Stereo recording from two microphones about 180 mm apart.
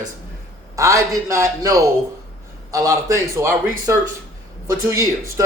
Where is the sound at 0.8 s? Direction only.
15° right (ahead or behind).